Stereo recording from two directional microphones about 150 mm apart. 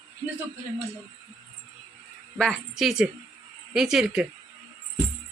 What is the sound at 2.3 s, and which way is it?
A woman's voice, 5° left (ahead or behind).